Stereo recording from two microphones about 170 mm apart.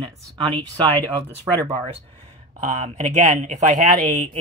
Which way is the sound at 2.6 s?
45° right (ahead or behind).